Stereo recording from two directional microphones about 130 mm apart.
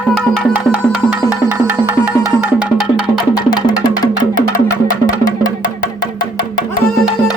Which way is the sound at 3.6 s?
35° left (ahead or behind).